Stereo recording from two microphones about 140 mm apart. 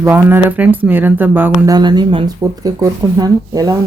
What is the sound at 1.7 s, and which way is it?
A woman's voice, 30° right (ahead or behind).